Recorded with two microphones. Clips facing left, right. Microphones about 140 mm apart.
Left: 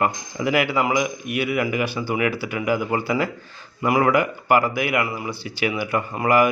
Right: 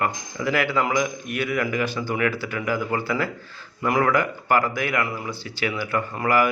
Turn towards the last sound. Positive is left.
turn(degrees=20)  # may be behind; listen again after turning